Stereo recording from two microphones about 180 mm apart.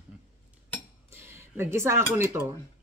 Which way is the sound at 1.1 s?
15° right (ahead or behind).